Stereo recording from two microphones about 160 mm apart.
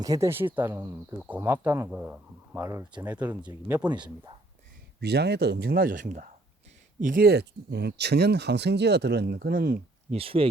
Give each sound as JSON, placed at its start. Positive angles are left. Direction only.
{"t": 0.0, "sound": "speech", "side_deg": -20}
{"t": 2.6, "sound": "speech", "side_deg": -20}
{"t": 4.9, "sound": "speech", "side_deg": -90}
{"t": 7.0, "sound": "speech", "side_deg": -65}
{"t": 10.1, "sound": "speech", "side_deg": -35}